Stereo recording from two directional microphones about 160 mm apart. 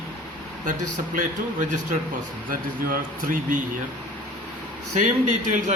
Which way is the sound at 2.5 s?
55° right (ahead or behind).